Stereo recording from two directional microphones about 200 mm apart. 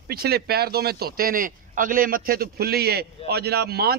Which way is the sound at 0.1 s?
50° right (ahead or behind).